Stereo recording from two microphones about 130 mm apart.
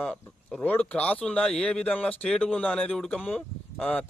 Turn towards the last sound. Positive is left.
turn(degrees=5)  # may be behind; listen again after turning